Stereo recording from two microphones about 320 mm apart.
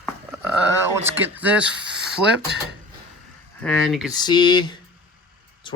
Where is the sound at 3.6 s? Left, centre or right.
Centre.